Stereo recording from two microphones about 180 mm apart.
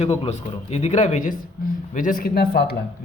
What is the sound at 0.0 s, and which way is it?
Speech, 40° left (ahead or behind).